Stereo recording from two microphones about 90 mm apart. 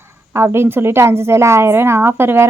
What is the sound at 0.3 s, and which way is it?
Speech, 30° right (ahead or behind).